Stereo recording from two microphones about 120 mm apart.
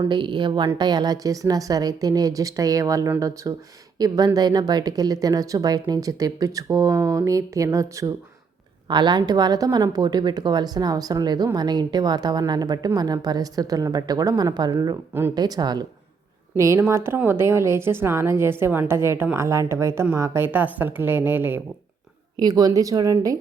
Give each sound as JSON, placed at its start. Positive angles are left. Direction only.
{"t": 0.1, "sound": "a woman's voice", "side_deg": -40}
{"t": 8.9, "sound": "a woman's voice", "side_deg": -40}
{"t": 16.6, "sound": "a woman's voice", "side_deg": -25}
{"t": 22.4, "sound": "speech", "side_deg": -30}